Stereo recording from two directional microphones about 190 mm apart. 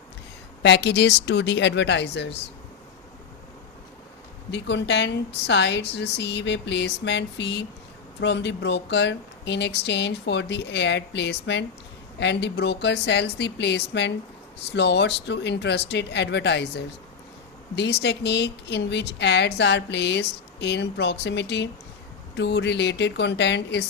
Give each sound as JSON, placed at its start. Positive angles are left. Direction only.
{"t": 0.6, "sound": "a woman's voice", "side_deg": 65}
{"t": 4.5, "sound": "a woman's voice", "side_deg": 65}